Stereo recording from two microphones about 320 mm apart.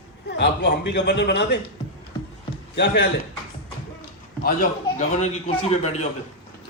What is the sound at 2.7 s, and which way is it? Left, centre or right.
Speech, left.